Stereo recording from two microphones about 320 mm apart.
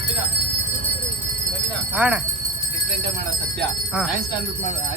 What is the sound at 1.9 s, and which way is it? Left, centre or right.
Speech, centre.